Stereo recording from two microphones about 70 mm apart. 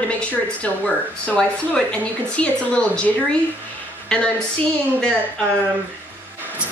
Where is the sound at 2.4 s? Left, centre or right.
Centre.